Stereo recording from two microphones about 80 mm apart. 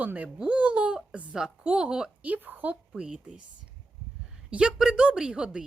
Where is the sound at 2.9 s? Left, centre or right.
Centre.